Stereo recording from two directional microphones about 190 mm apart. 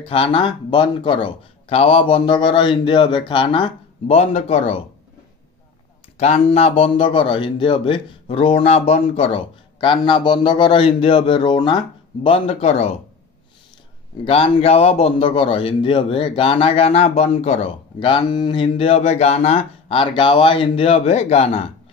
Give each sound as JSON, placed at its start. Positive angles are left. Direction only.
{"t": 0.0, "sound": "a man's voice", "side_deg": 30}
{"t": 6.1, "sound": "a man's voice", "side_deg": 35}
{"t": 14.2, "sound": "a man's voice", "side_deg": 30}